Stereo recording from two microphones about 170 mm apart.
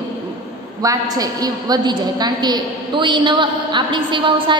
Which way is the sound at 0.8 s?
20° right (ahead or behind).